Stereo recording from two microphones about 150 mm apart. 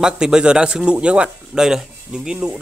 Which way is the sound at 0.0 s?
5° right (ahead or behind).